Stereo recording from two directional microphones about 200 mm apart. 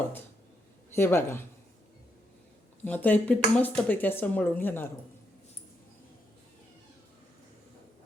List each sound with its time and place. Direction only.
0.9 s a man's voice: 10° left (ahead or behind)
2.8 s speech: 10° left (ahead or behind)